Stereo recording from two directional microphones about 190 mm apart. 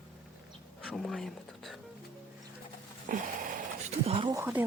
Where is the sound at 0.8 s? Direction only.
Centre (ahead or behind).